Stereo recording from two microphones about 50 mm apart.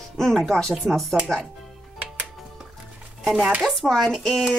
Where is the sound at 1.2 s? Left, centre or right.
Centre.